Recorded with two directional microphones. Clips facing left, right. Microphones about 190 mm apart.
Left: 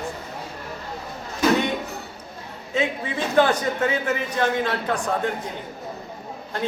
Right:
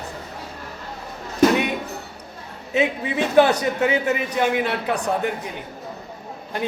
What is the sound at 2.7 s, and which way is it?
A man's voice, 15° right (ahead or behind).